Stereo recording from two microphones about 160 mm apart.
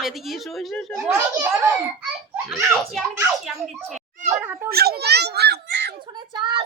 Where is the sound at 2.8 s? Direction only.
Centre (ahead or behind).